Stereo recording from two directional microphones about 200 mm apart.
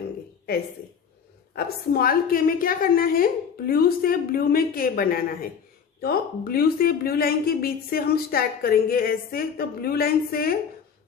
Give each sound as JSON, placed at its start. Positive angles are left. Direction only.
{"t": 1.5, "sound": "a woman's voice", "side_deg": 50}